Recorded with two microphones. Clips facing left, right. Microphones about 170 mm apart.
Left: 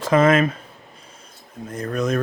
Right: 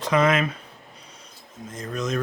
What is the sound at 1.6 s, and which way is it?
Speech, 60° left (ahead or behind).